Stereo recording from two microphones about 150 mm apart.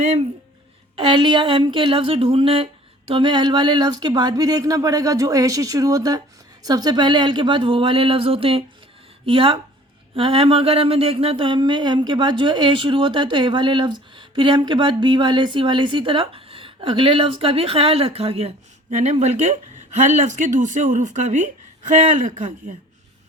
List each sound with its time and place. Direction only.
0.0 s speech: 50° right (ahead or behind)
0.9 s speech: 35° right (ahead or behind); by 22.7 s 55° right (ahead or behind)